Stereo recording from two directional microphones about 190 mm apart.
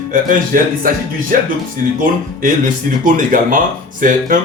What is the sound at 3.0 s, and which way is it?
Speech, 45° right (ahead or behind).